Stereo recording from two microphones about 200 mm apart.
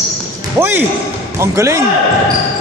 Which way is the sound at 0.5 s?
10° right (ahead or behind).